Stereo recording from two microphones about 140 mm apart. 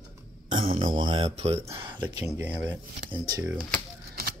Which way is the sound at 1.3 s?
45° right (ahead or behind).